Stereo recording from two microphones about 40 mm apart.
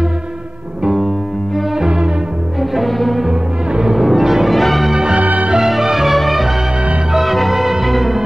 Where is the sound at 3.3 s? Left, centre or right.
Centre.